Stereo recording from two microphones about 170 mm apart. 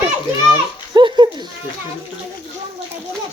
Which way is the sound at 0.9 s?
25° right (ahead or behind).